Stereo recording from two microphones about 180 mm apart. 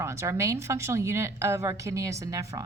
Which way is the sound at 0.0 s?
15° right (ahead or behind).